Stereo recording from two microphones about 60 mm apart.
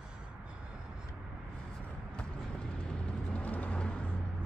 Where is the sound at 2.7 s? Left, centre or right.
Centre.